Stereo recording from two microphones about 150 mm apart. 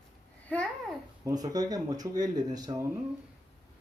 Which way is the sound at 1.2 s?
25° right (ahead or behind).